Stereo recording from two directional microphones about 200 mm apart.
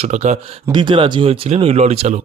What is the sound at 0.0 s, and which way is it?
Speech, 35° right (ahead or behind).